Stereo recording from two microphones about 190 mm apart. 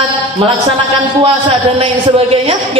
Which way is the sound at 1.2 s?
30° right (ahead or behind).